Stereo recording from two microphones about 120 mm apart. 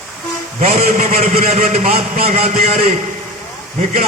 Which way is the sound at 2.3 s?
75° right (ahead or behind).